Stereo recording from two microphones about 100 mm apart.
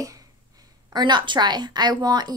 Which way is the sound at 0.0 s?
35° right (ahead or behind).